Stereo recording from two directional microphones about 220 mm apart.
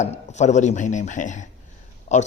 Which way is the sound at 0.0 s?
30° left (ahead or behind).